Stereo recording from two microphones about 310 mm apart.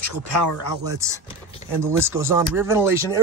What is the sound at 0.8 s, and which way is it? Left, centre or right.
Speech, centre.